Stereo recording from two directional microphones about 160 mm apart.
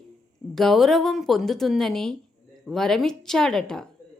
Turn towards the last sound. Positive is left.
turn(degrees=5)  # may be behind; listen again after turning